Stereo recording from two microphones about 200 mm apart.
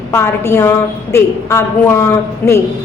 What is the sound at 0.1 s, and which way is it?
A woman's voice, 10° left (ahead or behind).